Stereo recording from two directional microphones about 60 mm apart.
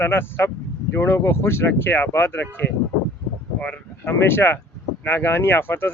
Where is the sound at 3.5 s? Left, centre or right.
Left.